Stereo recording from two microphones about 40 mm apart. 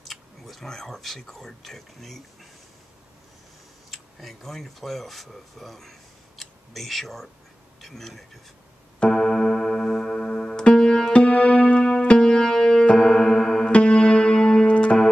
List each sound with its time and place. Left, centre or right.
0.0 s a sound: centre
1.6 s speech: centre
3.9 s speech: centre
9.1 s music: centre
13.7 s music: left